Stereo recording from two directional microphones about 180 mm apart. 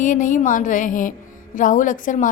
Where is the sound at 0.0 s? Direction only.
45° left (ahead or behind).